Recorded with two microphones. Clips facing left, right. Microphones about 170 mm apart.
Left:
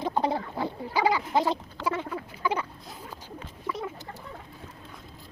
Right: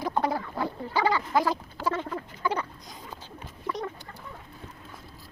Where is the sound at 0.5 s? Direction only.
15° left (ahead or behind).